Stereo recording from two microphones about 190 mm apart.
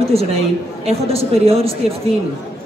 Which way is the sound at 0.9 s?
30° right (ahead or behind).